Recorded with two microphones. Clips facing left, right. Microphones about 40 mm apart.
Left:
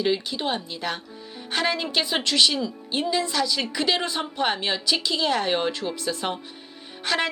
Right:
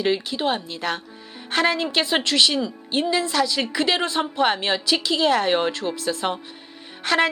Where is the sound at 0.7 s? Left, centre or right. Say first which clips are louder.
Right 3 dB; centre.